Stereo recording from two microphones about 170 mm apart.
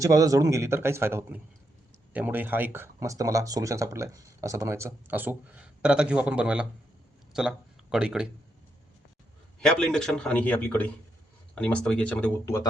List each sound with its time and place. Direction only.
0.0 s speech: 20° right (ahead or behind)
9.6 s a man's voice: 5° left (ahead or behind)